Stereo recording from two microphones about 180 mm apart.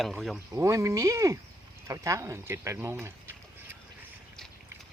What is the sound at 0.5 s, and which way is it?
Speech, 15° right (ahead or behind).